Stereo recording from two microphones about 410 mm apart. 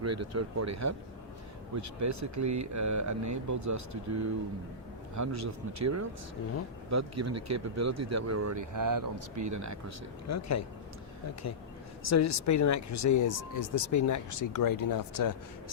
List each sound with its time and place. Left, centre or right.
0.0 s speech: right
10.2 s speech: left